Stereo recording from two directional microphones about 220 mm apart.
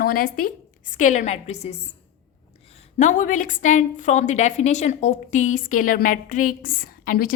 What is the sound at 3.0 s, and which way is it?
A woman's voice, 35° left (ahead or behind).